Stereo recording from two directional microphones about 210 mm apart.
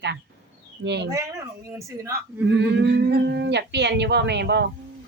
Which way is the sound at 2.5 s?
55° right (ahead or behind).